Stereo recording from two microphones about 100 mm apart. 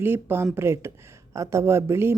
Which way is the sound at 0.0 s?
20° right (ahead or behind).